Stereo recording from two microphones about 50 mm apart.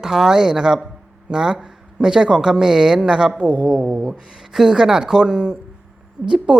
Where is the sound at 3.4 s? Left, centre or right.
Left.